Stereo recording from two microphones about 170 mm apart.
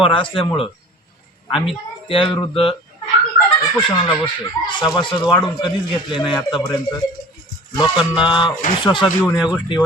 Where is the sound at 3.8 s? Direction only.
30° left (ahead or behind).